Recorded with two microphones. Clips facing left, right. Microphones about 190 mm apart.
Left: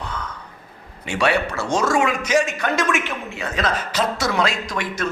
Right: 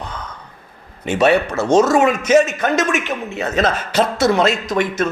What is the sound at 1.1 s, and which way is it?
A man's voice, 20° right (ahead or behind).